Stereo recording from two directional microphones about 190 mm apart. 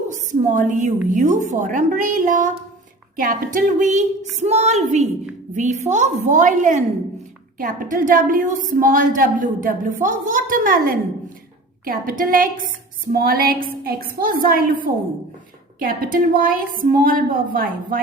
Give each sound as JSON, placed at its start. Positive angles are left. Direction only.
{"t": 0.1, "sound": "a woman's voice", "side_deg": -40}